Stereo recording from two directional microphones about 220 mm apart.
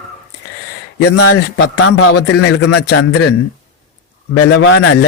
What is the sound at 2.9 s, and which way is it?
Speech, 90° left.